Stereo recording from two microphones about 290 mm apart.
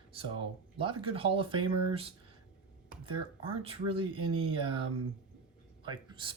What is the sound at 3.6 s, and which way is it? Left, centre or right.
Speech, centre.